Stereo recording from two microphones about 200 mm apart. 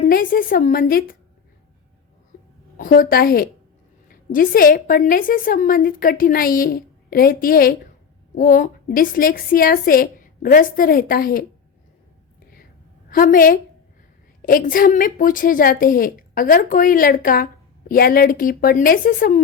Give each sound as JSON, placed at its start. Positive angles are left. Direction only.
{"t": 0.1, "sound": "a woman's voice", "side_deg": 45}
{"t": 2.7, "sound": "a woman's voice", "side_deg": 45}
{"t": 13.1, "sound": "a woman's voice", "side_deg": 45}